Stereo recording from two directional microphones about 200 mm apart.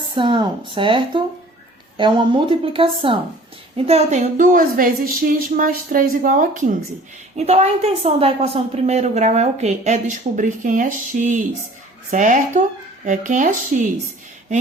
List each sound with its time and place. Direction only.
0.2 s a woman's voice: 25° right (ahead or behind); by 13.8 s 40° right (ahead or behind)